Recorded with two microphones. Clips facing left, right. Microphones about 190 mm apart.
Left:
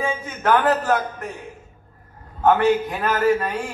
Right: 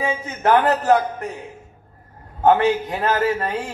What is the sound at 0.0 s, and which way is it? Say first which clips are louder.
Speech: right 2 dB; 25° right (ahead or behind).